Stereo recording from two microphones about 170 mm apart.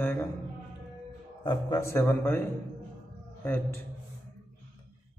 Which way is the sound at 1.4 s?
20° left (ahead or behind).